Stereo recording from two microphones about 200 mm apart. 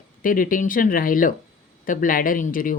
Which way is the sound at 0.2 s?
45° left (ahead or behind).